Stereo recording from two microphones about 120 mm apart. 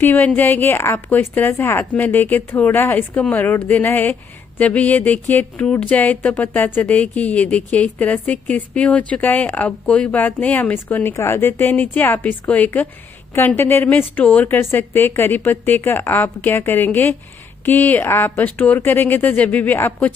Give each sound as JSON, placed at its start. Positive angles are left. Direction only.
{"t": 0.0, "sound": "a woman's voice", "side_deg": 15}